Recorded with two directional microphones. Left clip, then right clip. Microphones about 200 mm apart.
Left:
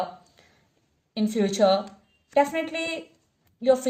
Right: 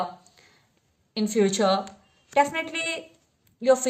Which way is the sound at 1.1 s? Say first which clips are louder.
Right 1 dB; 40° right (ahead or behind).